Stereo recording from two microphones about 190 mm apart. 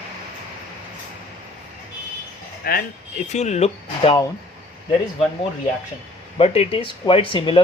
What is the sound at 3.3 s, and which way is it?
Speech, 35° left (ahead or behind).